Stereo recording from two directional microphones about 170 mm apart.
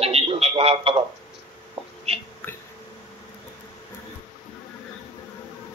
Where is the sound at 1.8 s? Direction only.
35° right (ahead or behind).